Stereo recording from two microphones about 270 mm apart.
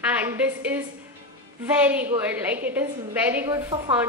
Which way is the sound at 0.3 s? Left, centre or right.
Centre.